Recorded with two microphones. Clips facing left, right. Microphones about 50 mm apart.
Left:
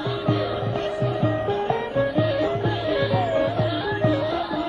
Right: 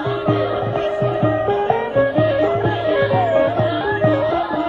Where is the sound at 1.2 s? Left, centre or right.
Right.